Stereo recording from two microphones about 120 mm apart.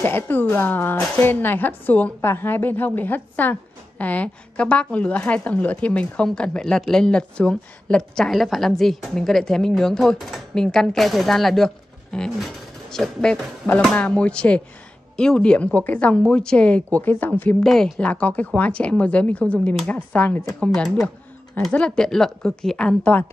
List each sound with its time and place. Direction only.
0.0 s a woman's voice: 15° left (ahead or behind)